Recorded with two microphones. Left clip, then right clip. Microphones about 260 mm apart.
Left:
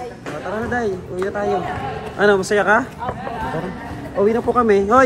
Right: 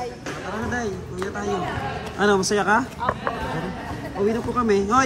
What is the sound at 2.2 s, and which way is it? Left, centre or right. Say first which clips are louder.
Speech: left 5 dB; centre.